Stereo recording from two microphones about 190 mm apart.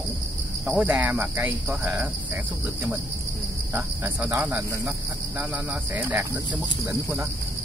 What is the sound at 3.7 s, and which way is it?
Cricket, 10° right (ahead or behind).